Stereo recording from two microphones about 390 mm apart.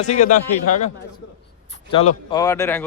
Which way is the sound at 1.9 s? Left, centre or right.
Centre.